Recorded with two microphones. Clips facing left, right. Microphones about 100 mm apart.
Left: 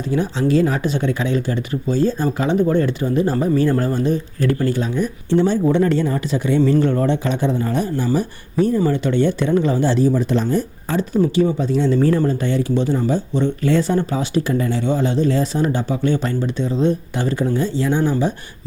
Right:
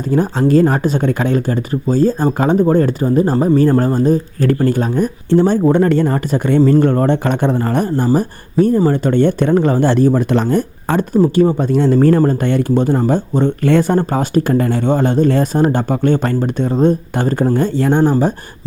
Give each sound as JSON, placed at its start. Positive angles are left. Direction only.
{"t": 0.1, "sound": "speech", "side_deg": -45}
{"t": 11.2, "sound": "speech", "side_deg": -45}